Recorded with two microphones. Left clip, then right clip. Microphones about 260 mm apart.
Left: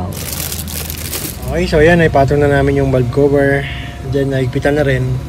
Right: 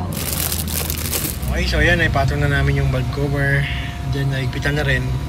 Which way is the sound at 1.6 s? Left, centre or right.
Centre.